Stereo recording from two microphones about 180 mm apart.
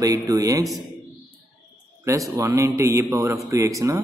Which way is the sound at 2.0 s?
15° right (ahead or behind).